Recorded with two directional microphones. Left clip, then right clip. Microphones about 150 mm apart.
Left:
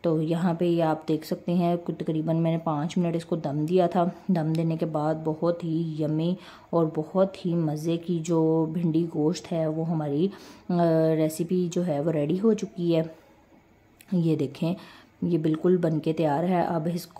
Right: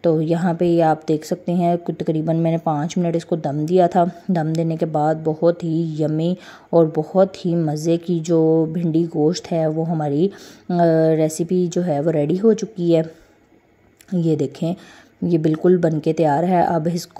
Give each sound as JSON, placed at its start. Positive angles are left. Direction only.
{"t": 0.0, "sound": "a woman's voice", "side_deg": -25}
{"t": 14.2, "sound": "a woman's voice", "side_deg": -20}